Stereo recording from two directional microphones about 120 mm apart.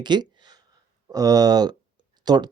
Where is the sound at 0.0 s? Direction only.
40° right (ahead or behind).